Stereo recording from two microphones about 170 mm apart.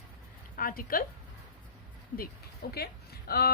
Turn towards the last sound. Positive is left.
turn(degrees=65)  # may be behind; listen again after turning